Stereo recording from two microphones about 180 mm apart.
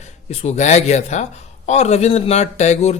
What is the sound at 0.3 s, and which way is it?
Speech, 40° left (ahead or behind).